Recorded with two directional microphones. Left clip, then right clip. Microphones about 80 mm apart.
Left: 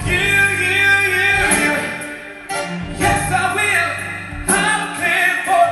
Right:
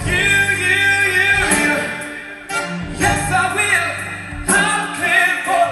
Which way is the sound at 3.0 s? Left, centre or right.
Right.